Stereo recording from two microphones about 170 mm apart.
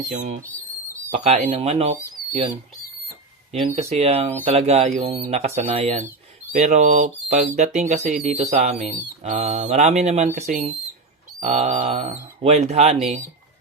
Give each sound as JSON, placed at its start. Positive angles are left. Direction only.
{"t": 0.1, "sound": "speech", "side_deg": -45}
{"t": 3.5, "sound": "speech", "side_deg": -40}
{"t": 6.0, "sound": "a sound", "side_deg": -10}
{"t": 6.6, "sound": "speech", "side_deg": -45}